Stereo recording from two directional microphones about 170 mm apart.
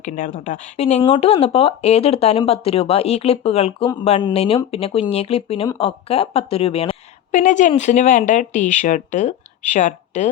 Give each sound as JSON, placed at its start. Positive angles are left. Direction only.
{"t": 0.0, "sound": "a woman's voice", "side_deg": 50}